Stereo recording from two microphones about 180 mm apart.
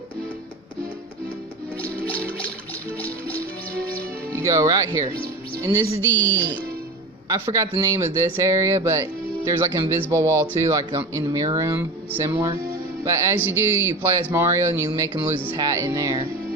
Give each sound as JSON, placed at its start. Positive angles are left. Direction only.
{"t": 2.0, "sound": "music", "side_deg": 10}
{"t": 4.3, "sound": "speech", "side_deg": -20}
{"t": 6.1, "sound": "speech", "side_deg": 10}
{"t": 7.3, "sound": "speech", "side_deg": -15}